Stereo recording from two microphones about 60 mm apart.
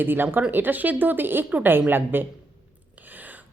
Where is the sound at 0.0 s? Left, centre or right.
Right.